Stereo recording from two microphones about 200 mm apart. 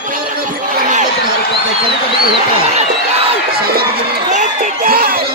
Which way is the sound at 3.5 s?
50° right (ahead or behind).